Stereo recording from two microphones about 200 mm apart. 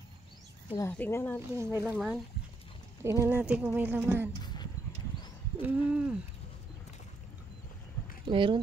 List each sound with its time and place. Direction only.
0.7 s speech: 15° left (ahead or behind)
1.6 s speech: 15° right (ahead or behind)
2.0 s speech: centre (ahead or behind)
3.0 s speech: 15° right (ahead or behind)
5.6 s speech: 5° right (ahead or behind)
8.3 s speech: 25° right (ahead or behind)